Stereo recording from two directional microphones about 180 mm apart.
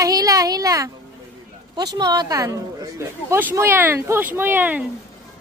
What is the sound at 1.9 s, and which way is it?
A woman's voice, 25° right (ahead or behind).